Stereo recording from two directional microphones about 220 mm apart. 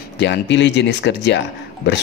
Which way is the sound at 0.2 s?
50° left (ahead or behind).